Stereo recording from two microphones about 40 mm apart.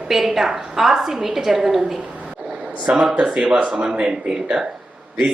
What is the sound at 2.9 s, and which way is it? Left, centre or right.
A woman's voice, centre.